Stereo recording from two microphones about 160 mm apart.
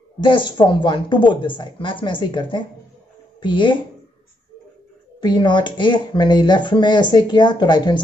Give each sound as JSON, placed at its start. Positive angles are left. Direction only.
{"t": 0.2, "sound": "speech", "side_deg": 30}
{"t": 5.2, "sound": "speech", "side_deg": 30}